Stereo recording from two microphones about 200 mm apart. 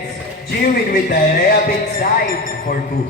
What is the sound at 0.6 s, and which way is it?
Music, 45° left (ahead or behind).